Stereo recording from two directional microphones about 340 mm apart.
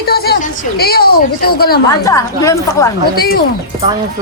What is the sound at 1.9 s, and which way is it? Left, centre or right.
Speech, centre.